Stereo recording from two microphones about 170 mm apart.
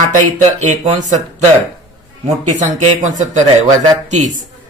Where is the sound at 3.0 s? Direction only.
45° right (ahead or behind).